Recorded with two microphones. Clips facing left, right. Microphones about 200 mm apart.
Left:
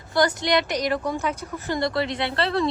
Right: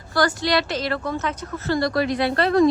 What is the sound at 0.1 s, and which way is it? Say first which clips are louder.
A woman's voice: even; 20° left (ahead or behind).